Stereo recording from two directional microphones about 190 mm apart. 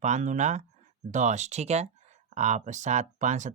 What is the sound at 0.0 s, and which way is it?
Speech, 40° right (ahead or behind).